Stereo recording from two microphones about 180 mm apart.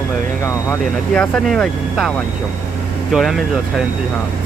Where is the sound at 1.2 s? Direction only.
5° left (ahead or behind).